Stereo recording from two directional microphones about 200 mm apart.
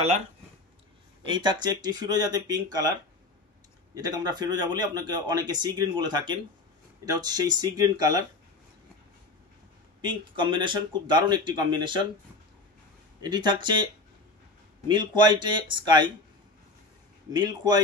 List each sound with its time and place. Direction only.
1.2 s a man's voice: 20° right (ahead or behind)
3.9 s a man's voice: 20° right (ahead or behind)
10.0 s a man's voice: 25° right (ahead or behind)
13.2 s a man's voice: 20° right (ahead or behind)
14.9 s a man's voice: 20° right (ahead or behind)
17.3 s a man's voice: 20° right (ahead or behind)